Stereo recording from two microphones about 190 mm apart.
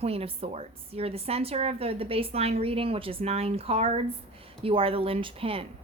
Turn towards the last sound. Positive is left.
turn(degrees=-30)  # may be behind; listen again after turning